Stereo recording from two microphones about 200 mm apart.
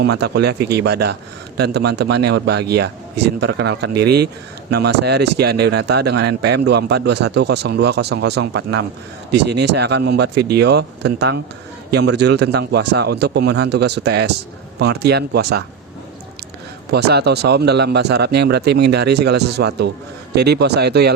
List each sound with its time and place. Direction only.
0.0 s speech: 55° right (ahead or behind)
16.9 s speech: 55° right (ahead or behind)